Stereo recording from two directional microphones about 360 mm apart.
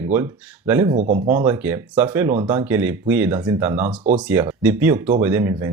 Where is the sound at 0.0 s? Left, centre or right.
Centre.